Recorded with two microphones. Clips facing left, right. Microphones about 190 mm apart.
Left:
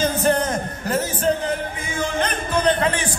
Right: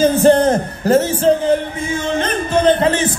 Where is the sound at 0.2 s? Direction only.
30° right (ahead or behind).